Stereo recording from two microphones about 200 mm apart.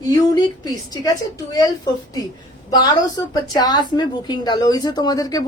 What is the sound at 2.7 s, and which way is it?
A woman's voice, 20° left (ahead or behind).